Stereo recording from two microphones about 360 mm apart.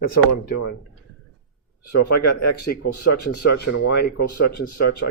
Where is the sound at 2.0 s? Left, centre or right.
Left.